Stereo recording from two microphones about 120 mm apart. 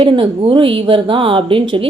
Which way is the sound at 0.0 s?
50° right (ahead or behind).